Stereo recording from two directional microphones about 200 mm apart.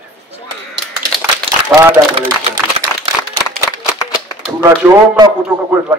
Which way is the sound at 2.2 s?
30° right (ahead or behind).